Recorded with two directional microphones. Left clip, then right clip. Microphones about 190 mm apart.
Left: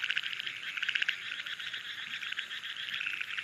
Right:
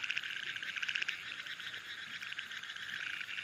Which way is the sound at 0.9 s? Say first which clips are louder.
Left 7 dB; 60° right (ahead or behind).